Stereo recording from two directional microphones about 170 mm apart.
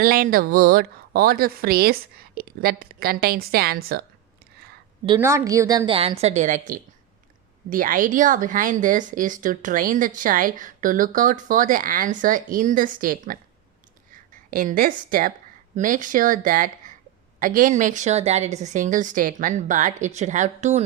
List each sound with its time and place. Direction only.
0.0 s speech: 60° right (ahead or behind)
5.2 s a woman's voice: 15° right (ahead or behind); by 13.4 s 55° right (ahead or behind)
14.5 s speech: 55° right (ahead or behind)